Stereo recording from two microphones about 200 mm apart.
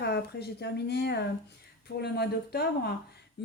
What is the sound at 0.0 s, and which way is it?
Speech, 55° left (ahead or behind).